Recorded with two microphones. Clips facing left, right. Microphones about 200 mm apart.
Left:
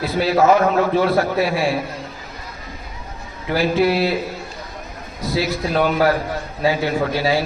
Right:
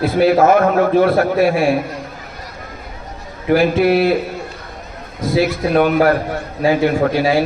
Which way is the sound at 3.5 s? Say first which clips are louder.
Right 5 dB; 55° right (ahead or behind).